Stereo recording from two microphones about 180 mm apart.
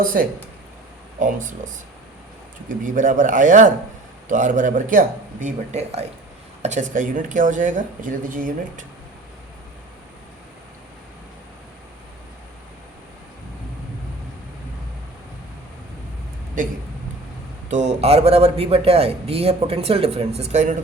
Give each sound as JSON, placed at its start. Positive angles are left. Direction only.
{"t": 0.0, "sound": "speech", "side_deg": -50}
{"t": 16.6, "sound": "speech", "side_deg": -50}